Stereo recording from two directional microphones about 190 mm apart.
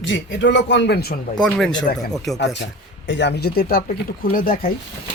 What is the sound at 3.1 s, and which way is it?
Speech, 65° left (ahead or behind).